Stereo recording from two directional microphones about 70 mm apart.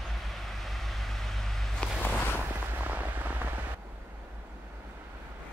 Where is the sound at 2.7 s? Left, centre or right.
Right.